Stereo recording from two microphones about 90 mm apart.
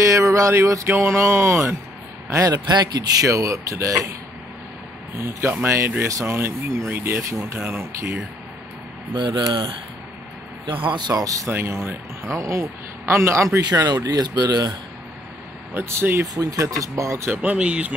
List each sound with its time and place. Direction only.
0.0 s a sound: 35° right (ahead or behind)
0.8 s a man's voice: 25° right (ahead or behind)
2.5 s speech: 50° right (ahead or behind)
5.2 s speech: 25° right (ahead or behind)
9.1 s speech: 60° right (ahead or behind)
10.9 s speech: 50° right (ahead or behind)
11.4 s speech: 30° right (ahead or behind)
13.7 s speech: 45° right (ahead or behind)
15.7 s speech: 30° right (ahead or behind)
16.3 s speech: 40° right (ahead or behind)
17.3 s speech: 15° right (ahead or behind)